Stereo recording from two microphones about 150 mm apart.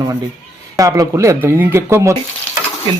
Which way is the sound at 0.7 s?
20° right (ahead or behind).